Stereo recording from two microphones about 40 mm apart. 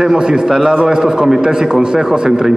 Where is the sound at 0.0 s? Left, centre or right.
Centre.